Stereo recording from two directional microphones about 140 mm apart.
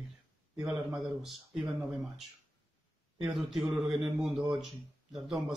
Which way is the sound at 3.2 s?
Centre (ahead or behind).